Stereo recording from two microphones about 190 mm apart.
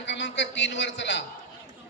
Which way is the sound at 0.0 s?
70° left (ahead or behind).